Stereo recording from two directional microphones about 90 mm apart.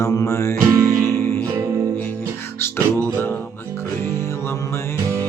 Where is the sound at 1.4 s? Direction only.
35° right (ahead or behind).